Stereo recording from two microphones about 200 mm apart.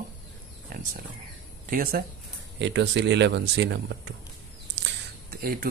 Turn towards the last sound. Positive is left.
turn(degrees=-50)  # may be behind; listen again after turning